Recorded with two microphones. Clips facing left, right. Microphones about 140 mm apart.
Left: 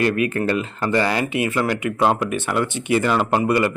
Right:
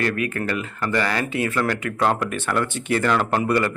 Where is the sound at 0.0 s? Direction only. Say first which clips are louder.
Left 4 dB; 20° left (ahead or behind).